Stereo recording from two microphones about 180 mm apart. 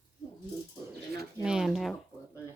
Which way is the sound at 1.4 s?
5° right (ahead or behind).